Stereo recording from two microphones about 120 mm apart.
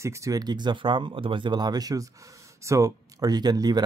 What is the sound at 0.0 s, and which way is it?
Speech, 25° right (ahead or behind).